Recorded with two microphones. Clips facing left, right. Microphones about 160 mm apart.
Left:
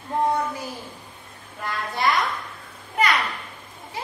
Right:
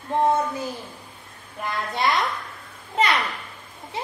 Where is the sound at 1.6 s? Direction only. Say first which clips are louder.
Right 1 dB; 20° right (ahead or behind).